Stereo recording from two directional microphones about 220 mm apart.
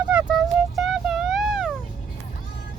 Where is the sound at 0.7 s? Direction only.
Centre (ahead or behind).